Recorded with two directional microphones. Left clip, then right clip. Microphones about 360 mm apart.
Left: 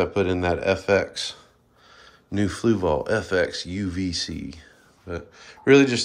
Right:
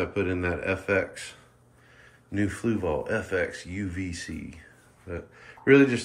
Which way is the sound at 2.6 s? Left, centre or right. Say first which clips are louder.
Left 8 dB; centre.